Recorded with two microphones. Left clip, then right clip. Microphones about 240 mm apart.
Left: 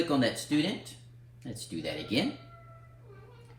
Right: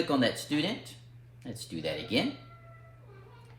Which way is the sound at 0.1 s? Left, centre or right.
Right.